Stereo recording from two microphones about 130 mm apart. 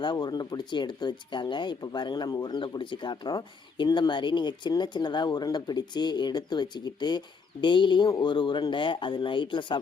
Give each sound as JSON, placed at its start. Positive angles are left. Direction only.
{"t": 0.0, "sound": "speech", "side_deg": 35}